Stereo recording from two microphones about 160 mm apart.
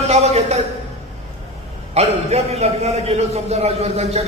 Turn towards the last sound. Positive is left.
turn(degrees=-40)  # may be behind; listen again after turning